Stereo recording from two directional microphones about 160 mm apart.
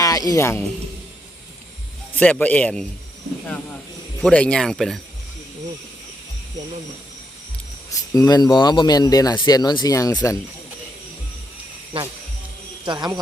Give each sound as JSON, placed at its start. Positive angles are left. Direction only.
{"t": 0.0, "sound": "speech", "side_deg": 20}
{"t": 2.1, "sound": "a man's voice", "side_deg": 10}
{"t": 4.2, "sound": "speech", "side_deg": 10}
{"t": 7.9, "sound": "speech", "side_deg": 20}
{"t": 12.8, "sound": "speech", "side_deg": -30}